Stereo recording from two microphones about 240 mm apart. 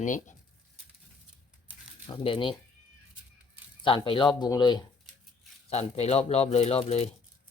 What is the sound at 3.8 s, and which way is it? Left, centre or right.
Speech, left.